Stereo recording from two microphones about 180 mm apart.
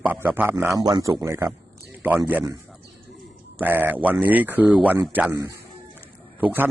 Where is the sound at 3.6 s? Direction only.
10° right (ahead or behind).